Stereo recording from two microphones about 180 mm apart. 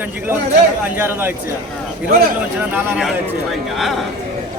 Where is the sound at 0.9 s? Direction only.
10° right (ahead or behind).